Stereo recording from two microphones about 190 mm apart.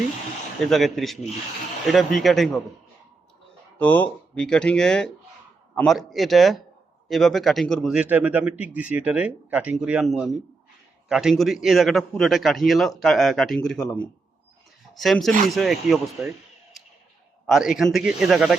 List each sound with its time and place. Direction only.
0.6 s a man's voice: centre (ahead or behind)
3.8 s a man's voice: 10° left (ahead or behind)
17.4 s a man's voice: centre (ahead or behind)